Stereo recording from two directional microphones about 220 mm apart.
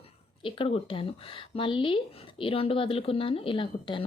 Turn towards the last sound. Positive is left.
turn(degrees=25)  # may be behind; listen again after turning